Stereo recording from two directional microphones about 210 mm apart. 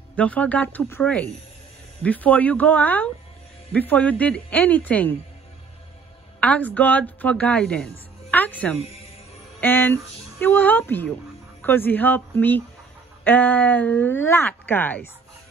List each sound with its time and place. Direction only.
0.1 s a woman's voice: 5° left (ahead or behind)
6.4 s a woman's voice: 5° left (ahead or behind)
9.6 s a sound: 10° left (ahead or behind)
10.4 s a woman's voice: 10° left (ahead or behind)